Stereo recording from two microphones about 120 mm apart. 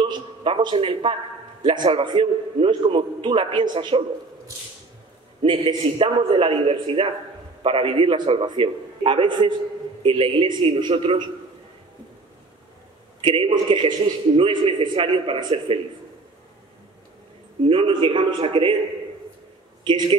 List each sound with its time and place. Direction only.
0.0 s a man's voice: 45° right (ahead or behind)
5.4 s a man's voice: 45° right (ahead or behind)
13.2 s a man's voice: 45° right (ahead or behind)
17.6 s a man's voice: 50° right (ahead or behind)
19.8 s speech: 40° right (ahead or behind)